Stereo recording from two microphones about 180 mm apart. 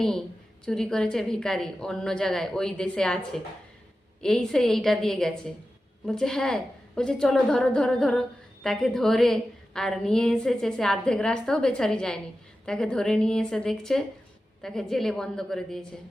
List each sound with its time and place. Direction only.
0.0 s a woman's voice: 5° left (ahead or behind)